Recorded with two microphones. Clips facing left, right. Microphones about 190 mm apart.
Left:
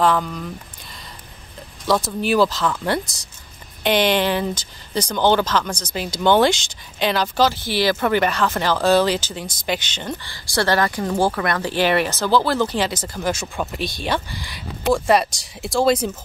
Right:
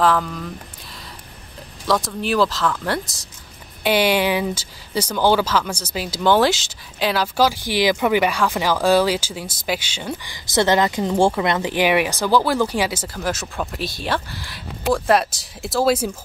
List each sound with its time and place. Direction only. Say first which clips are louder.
0.0 s speech: even; centre (ahead or behind)
1.9 s speech: left 1 dB; centre (ahead or behind)